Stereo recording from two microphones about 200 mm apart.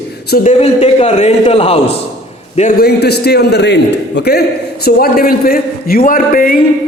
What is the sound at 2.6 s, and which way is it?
A man's voice, 45° left (ahead or behind).